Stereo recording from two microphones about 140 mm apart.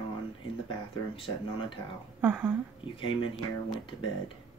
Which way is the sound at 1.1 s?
40° left (ahead or behind).